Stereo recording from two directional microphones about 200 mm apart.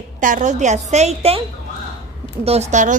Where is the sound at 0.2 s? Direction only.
40° right (ahead or behind).